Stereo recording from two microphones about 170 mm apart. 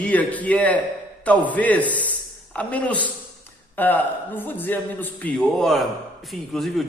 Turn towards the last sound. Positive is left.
turn(degrees=0)  # may be behind; listen again after turning